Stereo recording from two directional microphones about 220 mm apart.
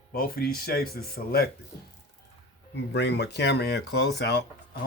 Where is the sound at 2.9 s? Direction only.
50° left (ahead or behind).